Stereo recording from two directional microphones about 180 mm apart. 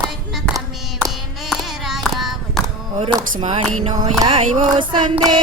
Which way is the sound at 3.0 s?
25° right (ahead or behind).